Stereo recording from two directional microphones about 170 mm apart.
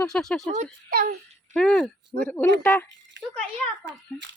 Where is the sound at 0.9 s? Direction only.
65° right (ahead or behind).